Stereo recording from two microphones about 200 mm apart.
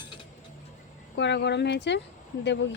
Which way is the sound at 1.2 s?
60° left (ahead or behind).